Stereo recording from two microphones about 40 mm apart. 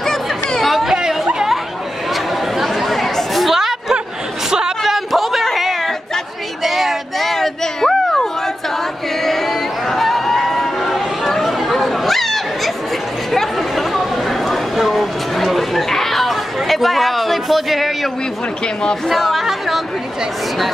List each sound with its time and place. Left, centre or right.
0.0 s chatter: centre
0.8 s chatter: centre
2.1 s chatter: centre
4.5 s a sound: centre
4.8 s chatter: centre
9.2 s a sound: centre
11.4 s chatter: centre
14.9 s a sound: centre
19.0 s chatter: centre